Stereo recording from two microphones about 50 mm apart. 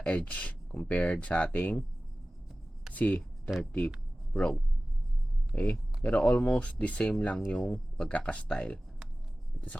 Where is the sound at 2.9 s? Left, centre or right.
Left.